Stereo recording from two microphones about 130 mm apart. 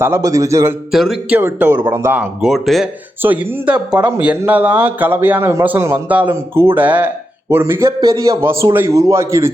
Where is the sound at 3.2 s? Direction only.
15° right (ahead or behind).